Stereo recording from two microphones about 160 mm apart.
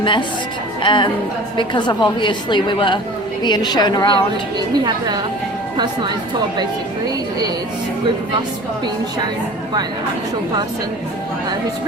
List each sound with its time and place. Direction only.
0.0 s a woman's voice: 30° left (ahead or behind)
5.7 s speech: 30° right (ahead or behind)